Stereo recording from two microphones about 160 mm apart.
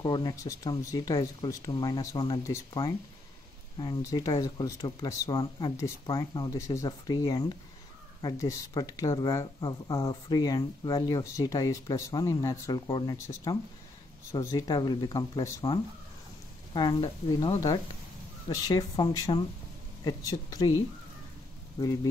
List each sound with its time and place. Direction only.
0.0 s speech: 25° left (ahead or behind)
17.4 s speech: 20° left (ahead or behind)